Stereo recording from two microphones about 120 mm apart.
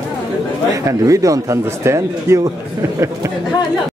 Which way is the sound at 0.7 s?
25° right (ahead or behind).